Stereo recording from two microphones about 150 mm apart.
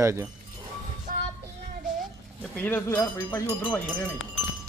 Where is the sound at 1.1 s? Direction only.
60° right (ahead or behind).